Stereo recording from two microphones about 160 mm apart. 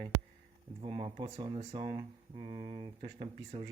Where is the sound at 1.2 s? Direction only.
30° right (ahead or behind).